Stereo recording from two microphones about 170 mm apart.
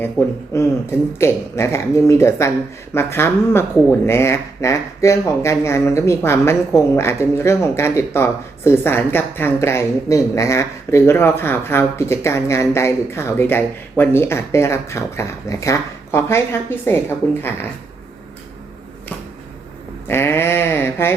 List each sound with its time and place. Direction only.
0.2 s speech: 15° left (ahead or behind)
20.1 s speech: 15° left (ahead or behind)